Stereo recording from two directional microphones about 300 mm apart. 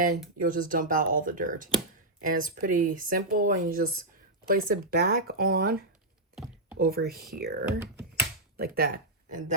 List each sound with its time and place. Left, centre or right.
0.0 s speech: right
6.3 s computer keyboard: centre
6.7 s speech: right
7.8 s a sound: centre
8.5 s speech: right